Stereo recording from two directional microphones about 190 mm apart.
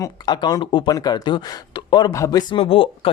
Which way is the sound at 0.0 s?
20° left (ahead or behind).